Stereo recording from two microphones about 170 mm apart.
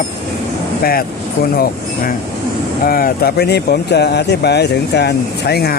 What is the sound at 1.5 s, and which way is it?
Speech, 65° left (ahead or behind).